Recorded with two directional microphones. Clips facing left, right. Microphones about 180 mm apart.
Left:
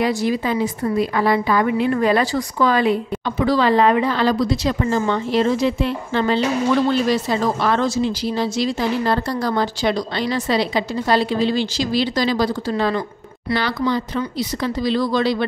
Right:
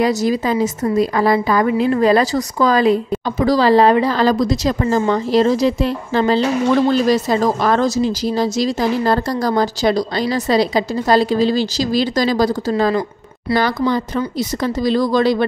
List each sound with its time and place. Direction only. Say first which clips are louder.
0.0 s a woman's voice: right 3 dB; 40° right (ahead or behind)